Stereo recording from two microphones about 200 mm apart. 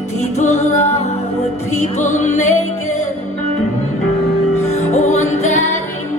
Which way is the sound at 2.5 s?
90° left.